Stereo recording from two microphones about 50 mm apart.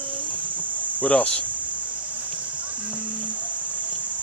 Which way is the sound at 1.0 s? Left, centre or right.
Left.